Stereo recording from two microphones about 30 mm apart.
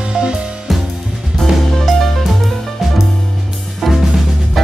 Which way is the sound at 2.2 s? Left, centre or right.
Centre.